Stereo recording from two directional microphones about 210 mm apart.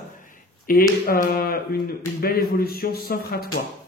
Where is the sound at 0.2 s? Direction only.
40° left (ahead or behind).